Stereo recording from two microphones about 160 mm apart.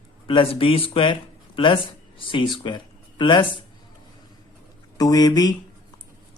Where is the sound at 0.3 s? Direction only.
35° left (ahead or behind).